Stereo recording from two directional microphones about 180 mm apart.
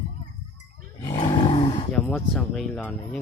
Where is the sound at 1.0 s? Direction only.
25° left (ahead or behind).